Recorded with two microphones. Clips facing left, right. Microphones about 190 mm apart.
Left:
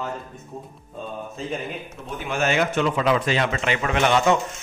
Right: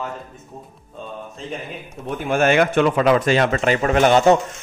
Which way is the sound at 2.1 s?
55° right (ahead or behind).